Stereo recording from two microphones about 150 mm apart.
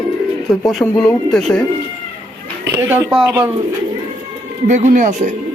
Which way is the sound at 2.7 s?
15° right (ahead or behind).